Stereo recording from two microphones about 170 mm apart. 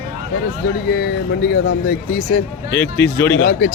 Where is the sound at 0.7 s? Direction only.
70° left (ahead or behind); by 2.5 s 50° left (ahead or behind).